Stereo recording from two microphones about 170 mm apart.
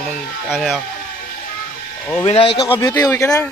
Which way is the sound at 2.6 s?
20° left (ahead or behind).